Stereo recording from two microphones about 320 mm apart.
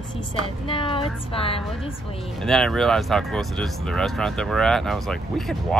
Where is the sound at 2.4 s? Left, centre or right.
Centre.